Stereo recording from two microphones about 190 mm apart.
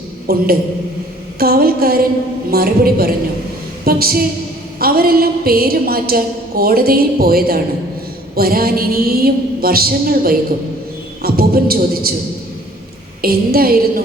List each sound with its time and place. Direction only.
0.3 s a woman's voice: 55° right (ahead or behind)
13.2 s a woman's voice: 50° right (ahead or behind)